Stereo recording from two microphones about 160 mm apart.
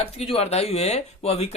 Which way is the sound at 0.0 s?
40° left (ahead or behind).